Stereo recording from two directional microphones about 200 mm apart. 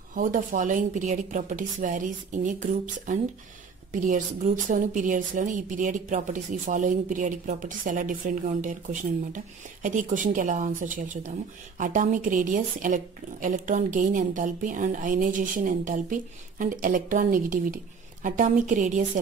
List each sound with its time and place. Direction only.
0.1 s a woman's voice: 40° right (ahead or behind)